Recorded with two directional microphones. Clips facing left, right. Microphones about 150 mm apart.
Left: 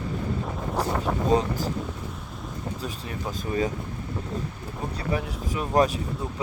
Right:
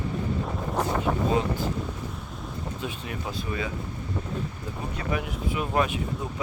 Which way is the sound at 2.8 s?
40° left (ahead or behind).